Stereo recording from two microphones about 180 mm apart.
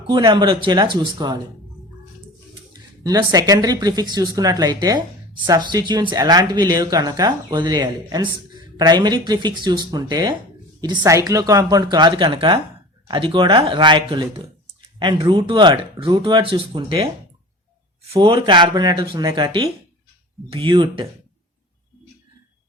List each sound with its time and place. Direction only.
0.1 s speech: 25° right (ahead or behind)
3.0 s speech: 20° right (ahead or behind)
18.1 s speech: 30° right (ahead or behind)